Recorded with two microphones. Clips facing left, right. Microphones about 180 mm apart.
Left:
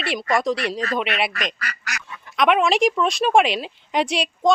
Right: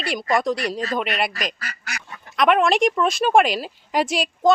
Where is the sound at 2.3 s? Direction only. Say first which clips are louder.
Right 1 dB; centre (ahead or behind).